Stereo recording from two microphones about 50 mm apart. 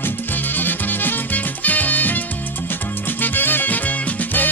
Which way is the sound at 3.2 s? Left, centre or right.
Left.